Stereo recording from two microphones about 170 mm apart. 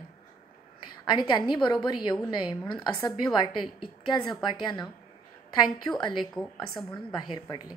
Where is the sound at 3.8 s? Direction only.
Centre (ahead or behind).